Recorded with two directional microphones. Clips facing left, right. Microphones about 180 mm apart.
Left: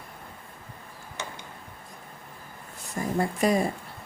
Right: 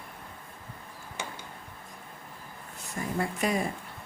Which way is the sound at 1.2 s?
10° right (ahead or behind).